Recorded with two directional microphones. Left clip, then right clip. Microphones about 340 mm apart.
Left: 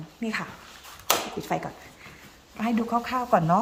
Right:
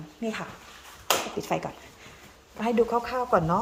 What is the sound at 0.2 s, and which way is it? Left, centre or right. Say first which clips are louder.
A woman's voice: left 2 dB; centre.